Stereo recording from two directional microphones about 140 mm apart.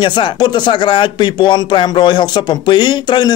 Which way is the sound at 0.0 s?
35° left (ahead or behind).